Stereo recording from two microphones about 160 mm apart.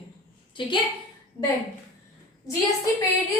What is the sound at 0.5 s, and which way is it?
Speech, 30° left (ahead or behind).